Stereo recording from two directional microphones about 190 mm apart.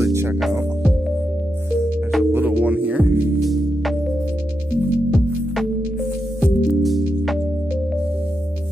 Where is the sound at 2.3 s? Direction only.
10° right (ahead or behind).